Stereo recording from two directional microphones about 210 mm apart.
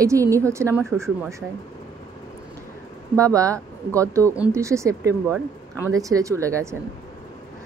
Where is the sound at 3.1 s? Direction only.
15° right (ahead or behind).